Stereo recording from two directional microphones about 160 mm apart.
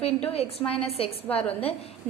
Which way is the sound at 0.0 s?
40° left (ahead or behind).